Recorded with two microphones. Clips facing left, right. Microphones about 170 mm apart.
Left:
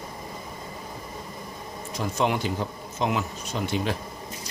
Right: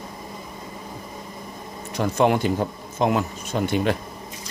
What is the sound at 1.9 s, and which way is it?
Speech, 60° right (ahead or behind).